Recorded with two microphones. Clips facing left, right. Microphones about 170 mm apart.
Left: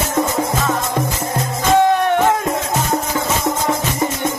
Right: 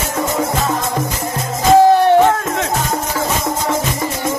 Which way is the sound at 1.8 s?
35° right (ahead or behind).